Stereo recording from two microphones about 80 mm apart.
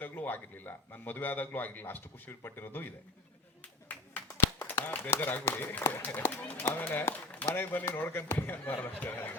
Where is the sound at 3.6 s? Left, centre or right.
Centre.